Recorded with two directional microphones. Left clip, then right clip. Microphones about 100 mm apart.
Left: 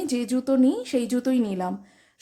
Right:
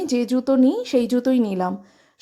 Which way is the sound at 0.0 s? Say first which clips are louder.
Right 5 dB; 30° right (ahead or behind).